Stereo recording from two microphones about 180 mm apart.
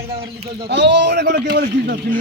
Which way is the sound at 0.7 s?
70° right (ahead or behind).